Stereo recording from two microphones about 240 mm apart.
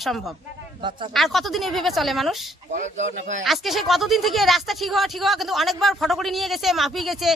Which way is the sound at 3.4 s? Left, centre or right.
Centre.